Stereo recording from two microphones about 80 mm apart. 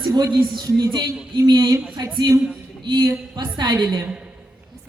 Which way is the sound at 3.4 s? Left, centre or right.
Right.